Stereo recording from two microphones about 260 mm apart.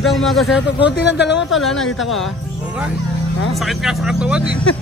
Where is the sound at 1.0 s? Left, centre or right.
Left.